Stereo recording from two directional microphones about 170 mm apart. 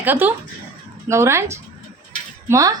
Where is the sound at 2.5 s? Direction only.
20° right (ahead or behind).